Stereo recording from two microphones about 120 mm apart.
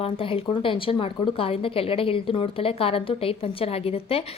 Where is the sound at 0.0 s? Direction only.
50° left (ahead or behind).